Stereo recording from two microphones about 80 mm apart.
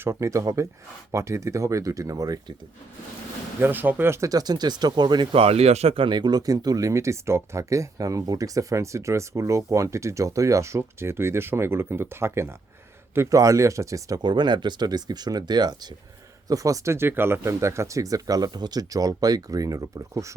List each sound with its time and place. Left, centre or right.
0.0 s speech: right
3.6 s speech: right
4.3 s speech: right
14.2 s speech: right
16.5 s speech: right